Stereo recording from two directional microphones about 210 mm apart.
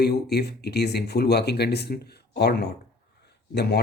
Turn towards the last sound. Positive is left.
turn(degrees=50)  # may be behind; listen again after turning